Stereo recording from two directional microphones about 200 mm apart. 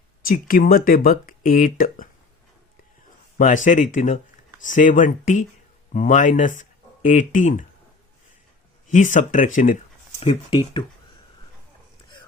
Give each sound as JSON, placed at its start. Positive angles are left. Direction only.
{"t": 0.3, "sound": "speech", "side_deg": 45}
{"t": 3.3, "sound": "speech", "side_deg": 40}
{"t": 8.9, "sound": "speech", "side_deg": 40}
{"t": 10.2, "sound": "speech", "side_deg": 25}